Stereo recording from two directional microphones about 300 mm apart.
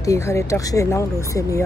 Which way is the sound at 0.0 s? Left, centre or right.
Centre.